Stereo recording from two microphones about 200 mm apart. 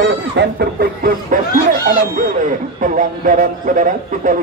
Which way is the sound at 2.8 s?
40° right (ahead or behind).